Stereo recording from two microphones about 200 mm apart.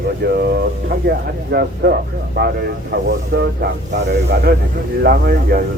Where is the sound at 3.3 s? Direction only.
65° right (ahead or behind).